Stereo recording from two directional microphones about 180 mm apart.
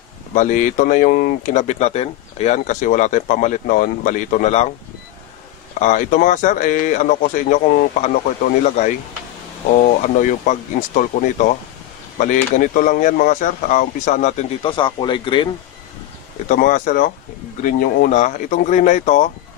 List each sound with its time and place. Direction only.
0.3 s speech: 45° left (ahead or behind)
5.8 s speech: 45° left (ahead or behind)
10.0 s speech: 45° left (ahead or behind)
14.6 s speech: 30° left (ahead or behind)
16.4 s speech: 45° left (ahead or behind)